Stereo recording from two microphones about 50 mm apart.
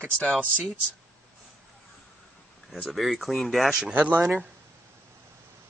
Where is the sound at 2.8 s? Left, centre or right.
Centre.